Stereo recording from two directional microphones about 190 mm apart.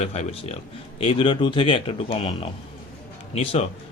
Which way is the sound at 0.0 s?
35° left (ahead or behind).